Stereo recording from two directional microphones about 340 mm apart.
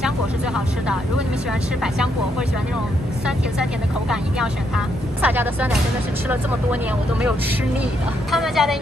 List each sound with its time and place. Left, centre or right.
4.1 s speech: centre